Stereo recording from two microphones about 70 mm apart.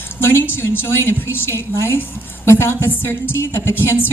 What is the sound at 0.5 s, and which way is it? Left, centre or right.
A woman's voice, left.